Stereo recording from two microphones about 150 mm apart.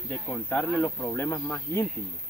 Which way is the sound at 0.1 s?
10° left (ahead or behind).